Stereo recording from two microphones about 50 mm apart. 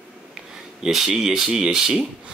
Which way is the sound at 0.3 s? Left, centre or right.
Centre.